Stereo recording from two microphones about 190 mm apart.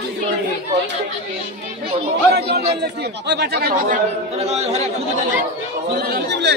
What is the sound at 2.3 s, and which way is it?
Speech, 60° right (ahead or behind).